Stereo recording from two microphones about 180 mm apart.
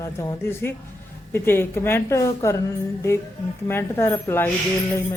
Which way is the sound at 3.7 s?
15° left (ahead or behind).